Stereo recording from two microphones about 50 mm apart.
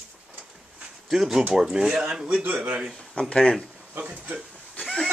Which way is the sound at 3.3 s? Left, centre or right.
Left.